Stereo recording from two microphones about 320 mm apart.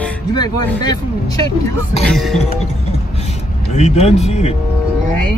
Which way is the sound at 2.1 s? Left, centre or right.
Centre.